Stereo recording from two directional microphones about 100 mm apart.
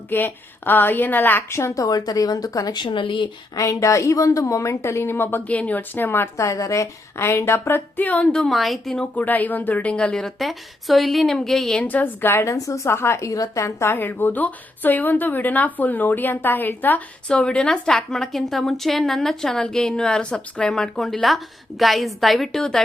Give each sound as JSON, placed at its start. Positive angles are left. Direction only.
{"t": 0.1, "sound": "a woman's voice", "side_deg": 20}
{"t": 2.8, "sound": "speech", "side_deg": 55}
{"t": 3.5, "sound": "a woman's voice", "side_deg": 35}
{"t": 9.1, "sound": "a woman's voice", "side_deg": 15}
{"t": 11.9, "sound": "a woman's voice", "side_deg": 20}